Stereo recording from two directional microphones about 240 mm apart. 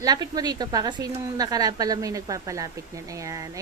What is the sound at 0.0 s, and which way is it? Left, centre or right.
A woman's voice, centre.